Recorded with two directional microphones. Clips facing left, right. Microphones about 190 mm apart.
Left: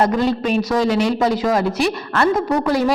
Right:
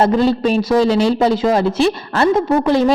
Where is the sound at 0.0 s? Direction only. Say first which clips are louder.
Right 4 dB; 30° right (ahead or behind).